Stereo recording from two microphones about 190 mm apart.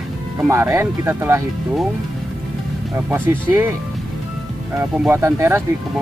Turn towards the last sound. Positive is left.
turn(degrees=-15)  # may be behind; listen again after turning